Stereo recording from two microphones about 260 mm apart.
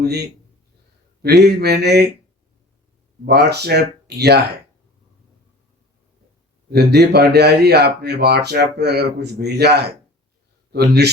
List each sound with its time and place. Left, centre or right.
0.0 s speech: right
3.2 s speech: right
6.7 s a man's voice: right